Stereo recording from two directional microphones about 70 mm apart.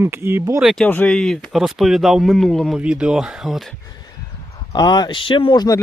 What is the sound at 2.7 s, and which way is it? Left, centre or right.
Speech, centre.